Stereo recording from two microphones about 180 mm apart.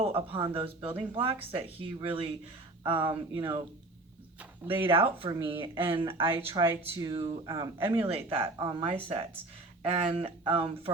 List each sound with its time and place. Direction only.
0.0 s speech: 30° right (ahead or behind)
4.7 s speech: 30° right (ahead or behind)
6.7 s speech: 15° right (ahead or behind); by 10.9 s 30° right (ahead or behind)